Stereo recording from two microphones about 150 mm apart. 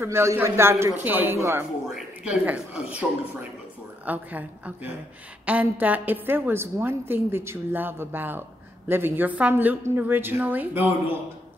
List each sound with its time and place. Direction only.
0.0 s a woman's voice: 20° right (ahead or behind)